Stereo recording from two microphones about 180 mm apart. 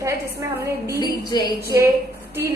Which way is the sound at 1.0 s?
20° left (ahead or behind).